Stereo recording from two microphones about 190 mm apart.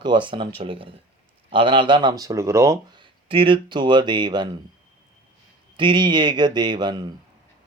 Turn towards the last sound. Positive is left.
turn(degrees=-20)  # may be behind; listen again after turning